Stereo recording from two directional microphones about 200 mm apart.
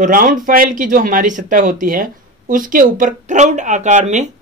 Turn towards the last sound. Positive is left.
turn(degrees=-35)  # may be behind; listen again after turning